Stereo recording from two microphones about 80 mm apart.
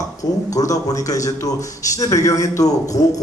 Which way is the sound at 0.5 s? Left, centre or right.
Left.